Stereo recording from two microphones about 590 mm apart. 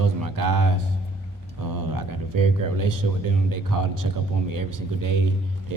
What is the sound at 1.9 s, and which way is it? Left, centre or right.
Speech, right.